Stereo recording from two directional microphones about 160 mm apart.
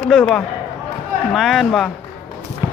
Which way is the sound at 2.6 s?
20° right (ahead or behind).